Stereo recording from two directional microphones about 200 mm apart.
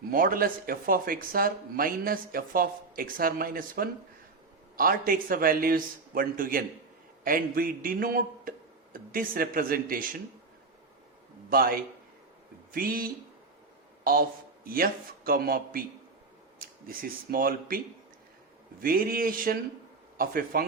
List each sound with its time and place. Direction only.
0.1 s speech: 45° right (ahead or behind)
11.4 s a man's voice: 45° right (ahead or behind)
18.8 s speech: 45° right (ahead or behind)